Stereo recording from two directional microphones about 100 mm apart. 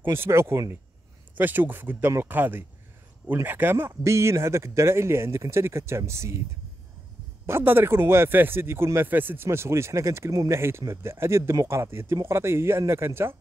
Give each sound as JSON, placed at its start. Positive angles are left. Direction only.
{"t": 0.0, "sound": "speech", "side_deg": -25}
{"t": 7.4, "sound": "speech", "side_deg": -25}